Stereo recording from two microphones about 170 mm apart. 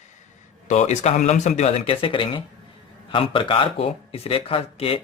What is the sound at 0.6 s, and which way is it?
Speech, 45° left (ahead or behind).